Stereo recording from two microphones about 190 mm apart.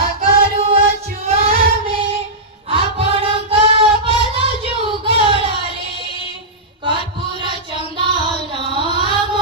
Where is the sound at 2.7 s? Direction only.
30° right (ahead or behind).